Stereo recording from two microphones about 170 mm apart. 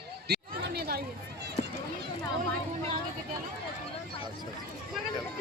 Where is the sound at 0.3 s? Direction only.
70° right (ahead or behind).